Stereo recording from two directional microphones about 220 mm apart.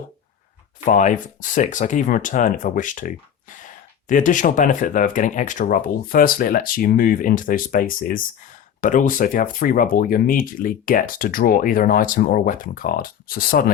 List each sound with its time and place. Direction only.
0.9 s speech: 35° left (ahead or behind)